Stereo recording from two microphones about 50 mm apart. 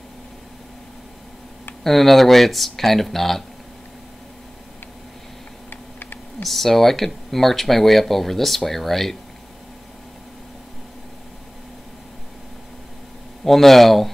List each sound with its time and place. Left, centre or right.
1.8 s speech: centre
5.7 s typing: left
6.4 s speech: centre
13.4 s speech: centre